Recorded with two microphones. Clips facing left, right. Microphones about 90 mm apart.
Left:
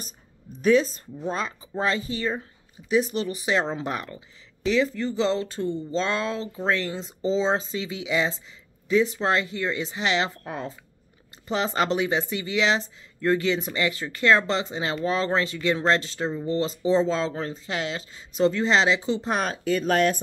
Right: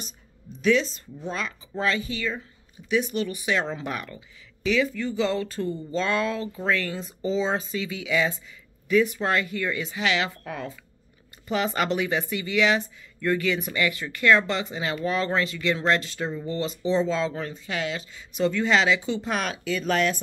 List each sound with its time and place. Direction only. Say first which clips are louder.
0.6 s speech: left 2 dB; 40° left (ahead or behind)